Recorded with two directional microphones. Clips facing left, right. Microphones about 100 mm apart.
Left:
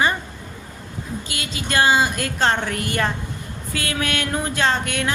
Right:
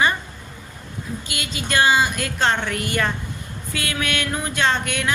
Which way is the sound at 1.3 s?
30° left (ahead or behind).